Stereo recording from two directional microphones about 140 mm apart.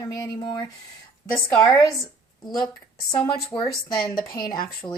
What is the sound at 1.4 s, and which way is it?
Speech, 10° left (ahead or behind).